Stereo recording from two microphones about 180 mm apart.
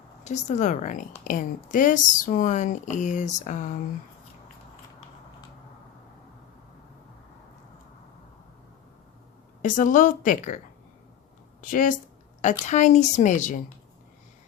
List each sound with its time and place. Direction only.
0.3 s a woman's voice: 40° left (ahead or behind)
9.6 s a woman's voice: 45° left (ahead or behind)
11.6 s a woman's voice: 50° left (ahead or behind)